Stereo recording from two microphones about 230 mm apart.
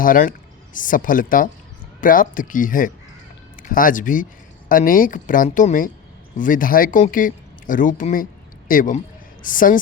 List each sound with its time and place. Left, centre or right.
0.0 s speech: left